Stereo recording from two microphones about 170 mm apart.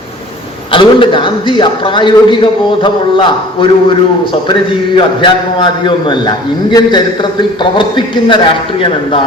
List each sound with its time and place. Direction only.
0.7 s a man's voice: 30° left (ahead or behind)
4.9 s a man's voice: 30° left (ahead or behind)